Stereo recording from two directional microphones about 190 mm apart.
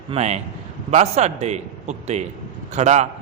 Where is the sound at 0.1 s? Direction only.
35° right (ahead or behind).